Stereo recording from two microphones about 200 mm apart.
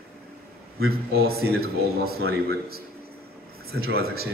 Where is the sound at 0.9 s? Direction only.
50° right (ahead or behind).